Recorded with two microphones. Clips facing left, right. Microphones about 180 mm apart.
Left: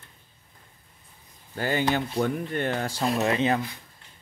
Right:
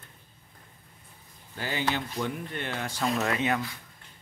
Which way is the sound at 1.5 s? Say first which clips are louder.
Left 5 dB; 50° left (ahead or behind).